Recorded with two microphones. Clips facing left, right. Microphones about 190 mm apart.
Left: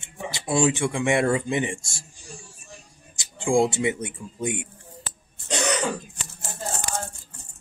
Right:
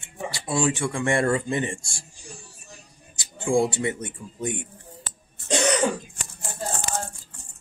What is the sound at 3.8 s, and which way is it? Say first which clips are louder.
Speech: left 2 dB; 10° left (ahead or behind).